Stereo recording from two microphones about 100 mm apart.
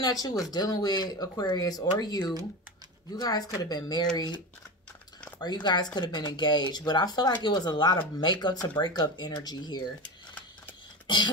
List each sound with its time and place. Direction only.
0.0 s speech: 40° left (ahead or behind)
5.4 s speech: 45° left (ahead or behind)
11.1 s speech: 50° left (ahead or behind)